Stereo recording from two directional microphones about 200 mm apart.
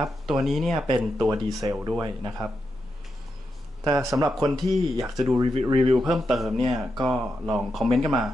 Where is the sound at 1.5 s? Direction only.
15° right (ahead or behind).